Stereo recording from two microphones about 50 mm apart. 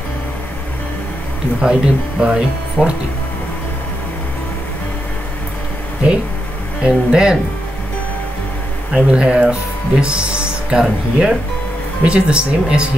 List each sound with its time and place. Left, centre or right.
1.6 s speech: centre
6.8 s speech: centre
8.9 s speech: centre